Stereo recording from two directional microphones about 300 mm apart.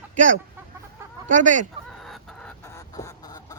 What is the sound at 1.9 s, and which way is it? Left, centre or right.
Goose, centre.